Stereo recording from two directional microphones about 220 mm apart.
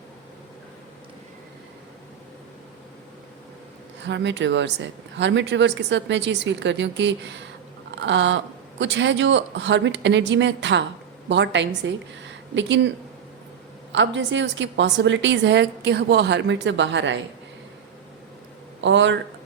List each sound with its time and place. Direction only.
4.0 s speech: 55° right (ahead or behind)
7.9 s a sound: 55° right (ahead or behind)
8.8 s a woman's voice: 55° right (ahead or behind)
13.9 s a woman's voice: 55° right (ahead or behind)
18.8 s speech: 55° right (ahead or behind)